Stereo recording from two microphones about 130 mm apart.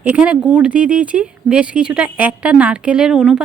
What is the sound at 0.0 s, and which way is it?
Speech, 10° right (ahead or behind).